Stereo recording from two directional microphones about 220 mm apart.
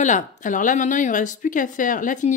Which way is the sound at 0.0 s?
35° left (ahead or behind).